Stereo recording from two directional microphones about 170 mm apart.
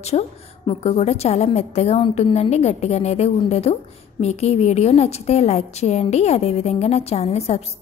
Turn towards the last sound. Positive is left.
turn(degrees=40)  # may be behind; listen again after turning